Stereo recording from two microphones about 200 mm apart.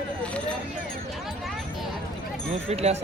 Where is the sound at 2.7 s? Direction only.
30° right (ahead or behind).